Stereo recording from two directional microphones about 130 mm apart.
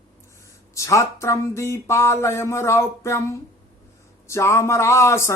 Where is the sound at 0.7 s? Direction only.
25° left (ahead or behind).